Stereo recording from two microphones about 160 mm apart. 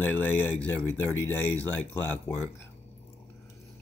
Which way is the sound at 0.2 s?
10° left (ahead or behind).